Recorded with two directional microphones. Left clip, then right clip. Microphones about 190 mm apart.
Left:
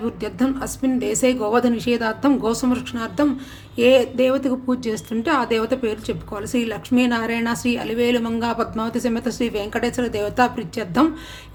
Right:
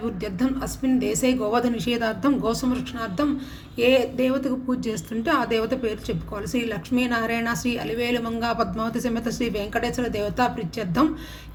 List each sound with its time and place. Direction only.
0.0 s speech: 25° left (ahead or behind)